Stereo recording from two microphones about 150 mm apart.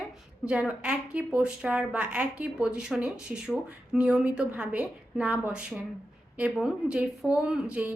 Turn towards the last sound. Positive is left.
turn(degrees=-10)  # may be behind; listen again after turning